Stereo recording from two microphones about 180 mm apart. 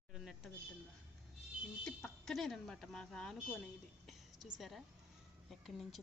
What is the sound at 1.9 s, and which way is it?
A woman's voice, centre (ahead or behind).